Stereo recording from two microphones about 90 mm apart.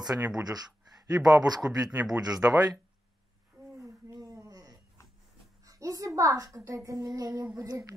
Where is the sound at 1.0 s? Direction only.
40° right (ahead or behind).